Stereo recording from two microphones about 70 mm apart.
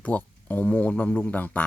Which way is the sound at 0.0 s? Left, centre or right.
Left.